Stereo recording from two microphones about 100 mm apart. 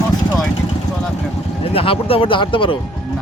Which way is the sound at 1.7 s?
65° left (ahead or behind).